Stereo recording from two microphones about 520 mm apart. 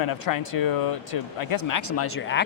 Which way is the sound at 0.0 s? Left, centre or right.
Left.